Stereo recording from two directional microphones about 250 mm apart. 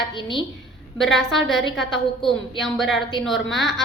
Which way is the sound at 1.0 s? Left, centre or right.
Centre.